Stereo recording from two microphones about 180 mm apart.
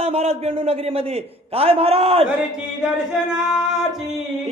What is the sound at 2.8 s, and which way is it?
Music, 5° right (ahead or behind).